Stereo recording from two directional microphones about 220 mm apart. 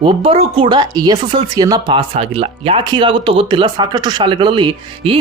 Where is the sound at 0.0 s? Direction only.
25° right (ahead or behind).